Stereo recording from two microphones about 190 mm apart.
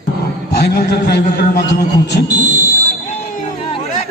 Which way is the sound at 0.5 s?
55° left (ahead or behind).